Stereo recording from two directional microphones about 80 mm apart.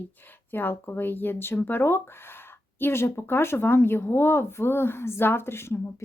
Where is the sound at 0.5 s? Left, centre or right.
Left.